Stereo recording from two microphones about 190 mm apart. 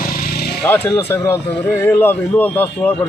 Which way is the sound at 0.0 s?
50° left (ahead or behind).